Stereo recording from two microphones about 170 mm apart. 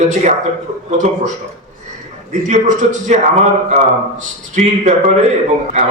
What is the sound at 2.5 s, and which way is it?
Speech, 45° right (ahead or behind).